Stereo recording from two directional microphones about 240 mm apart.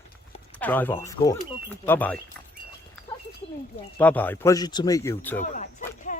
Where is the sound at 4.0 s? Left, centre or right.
Centre.